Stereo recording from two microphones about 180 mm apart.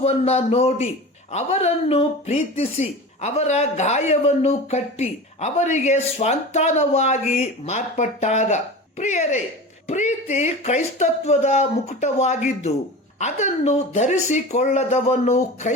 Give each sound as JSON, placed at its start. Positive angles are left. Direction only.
{"t": 0.0, "sound": "speech", "side_deg": 35}